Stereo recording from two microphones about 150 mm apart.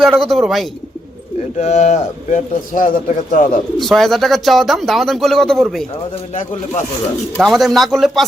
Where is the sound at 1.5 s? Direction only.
50° left (ahead or behind).